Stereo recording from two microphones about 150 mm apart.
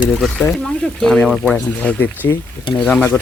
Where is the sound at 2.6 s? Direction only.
30° left (ahead or behind).